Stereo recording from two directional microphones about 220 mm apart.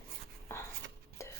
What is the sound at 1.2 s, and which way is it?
Chopping, 15° left (ahead or behind).